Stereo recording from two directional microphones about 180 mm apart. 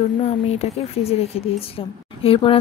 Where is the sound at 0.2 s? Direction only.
35° left (ahead or behind).